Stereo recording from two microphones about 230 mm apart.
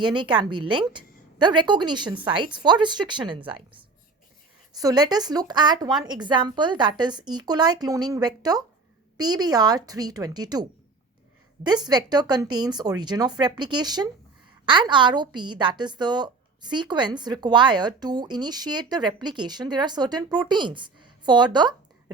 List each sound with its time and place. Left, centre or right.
0.0 s a woman's voice: centre